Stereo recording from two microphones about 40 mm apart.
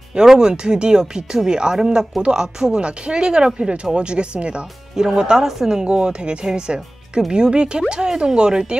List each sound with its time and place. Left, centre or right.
0.1 s speech: centre
4.9 s a woman's voice: centre
5.9 s speech: right